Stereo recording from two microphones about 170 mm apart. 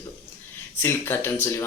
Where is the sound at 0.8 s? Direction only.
15° left (ahead or behind).